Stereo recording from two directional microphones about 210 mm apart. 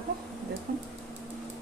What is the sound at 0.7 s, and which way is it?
Speech, 45° right (ahead or behind).